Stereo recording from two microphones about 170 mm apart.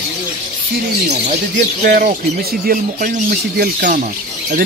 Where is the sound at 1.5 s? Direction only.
55° right (ahead or behind).